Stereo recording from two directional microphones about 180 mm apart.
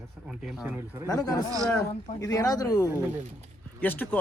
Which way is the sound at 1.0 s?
20° left (ahead or behind).